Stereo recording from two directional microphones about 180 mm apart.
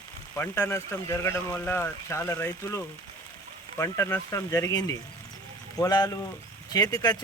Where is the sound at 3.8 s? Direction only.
15° left (ahead or behind).